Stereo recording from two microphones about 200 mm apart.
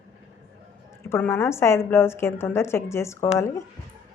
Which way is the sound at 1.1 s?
10° left (ahead or behind).